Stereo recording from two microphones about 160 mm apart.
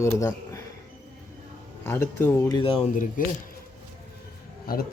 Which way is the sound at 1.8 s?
15° left (ahead or behind).